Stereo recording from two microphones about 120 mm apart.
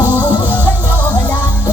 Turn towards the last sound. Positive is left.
turn(degrees=-15)  # may be behind; listen again after turning